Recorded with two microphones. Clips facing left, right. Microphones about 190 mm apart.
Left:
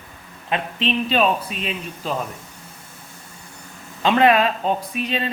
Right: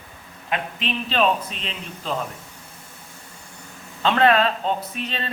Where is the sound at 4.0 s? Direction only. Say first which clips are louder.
Left 2 dB; 15° left (ahead or behind).